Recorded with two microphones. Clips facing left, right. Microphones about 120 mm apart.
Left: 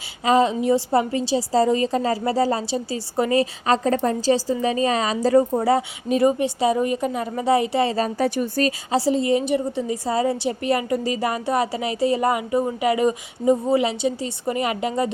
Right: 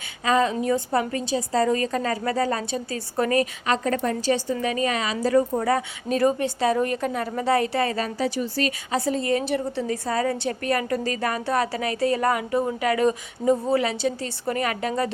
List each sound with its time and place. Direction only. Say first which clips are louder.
0.3 s a woman's voice: left 3 dB; 30° left (ahead or behind)
3.7 s speech: left 6 dB; 30° left (ahead or behind)
6.1 s speech: left 3 dB; 10° left (ahead or behind)
7.4 s a woman's voice: left 3 dB; 20° left (ahead or behind)
8.2 s speech: left 3 dB; 50° left (ahead or behind)
8.9 s a woman's voice: left 5 dB; 30° left (ahead or behind)
9.5 s a woman's voice: left 3 dB; 15° left (ahead or behind)